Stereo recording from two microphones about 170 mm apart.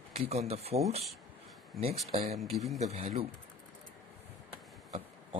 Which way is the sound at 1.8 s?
35° right (ahead or behind).